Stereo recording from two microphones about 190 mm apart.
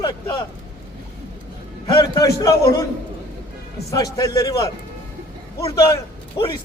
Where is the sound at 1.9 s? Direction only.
20° left (ahead or behind).